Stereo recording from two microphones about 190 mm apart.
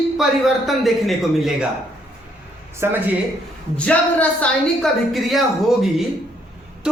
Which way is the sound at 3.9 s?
5° left (ahead or behind).